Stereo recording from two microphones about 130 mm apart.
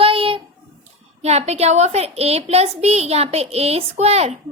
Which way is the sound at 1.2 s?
55° right (ahead or behind).